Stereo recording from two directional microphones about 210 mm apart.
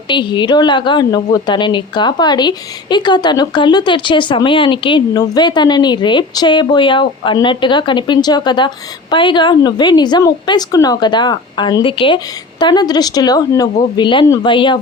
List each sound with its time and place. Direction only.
0.1 s a woman's voice: 20° left (ahead or behind)